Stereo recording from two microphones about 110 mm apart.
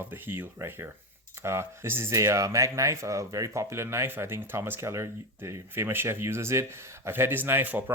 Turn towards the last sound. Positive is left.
turn(degrees=-20)  # may be behind; listen again after turning